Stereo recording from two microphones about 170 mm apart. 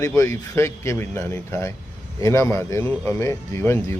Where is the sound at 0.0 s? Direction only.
20° left (ahead or behind).